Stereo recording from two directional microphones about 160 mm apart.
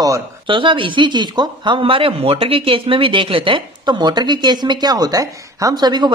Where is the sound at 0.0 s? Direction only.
25° right (ahead or behind).